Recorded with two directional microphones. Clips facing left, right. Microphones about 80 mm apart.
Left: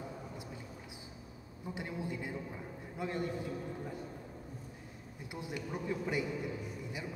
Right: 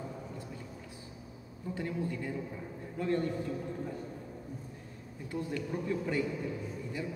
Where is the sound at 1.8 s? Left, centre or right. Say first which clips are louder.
Right 4 dB; centre.